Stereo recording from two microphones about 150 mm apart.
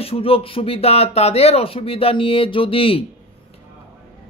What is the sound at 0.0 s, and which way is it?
Speech, 40° left (ahead or behind).